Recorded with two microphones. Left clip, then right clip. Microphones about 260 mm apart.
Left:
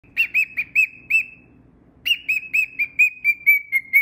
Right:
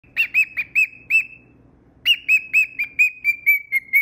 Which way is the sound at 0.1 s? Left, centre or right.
Centre.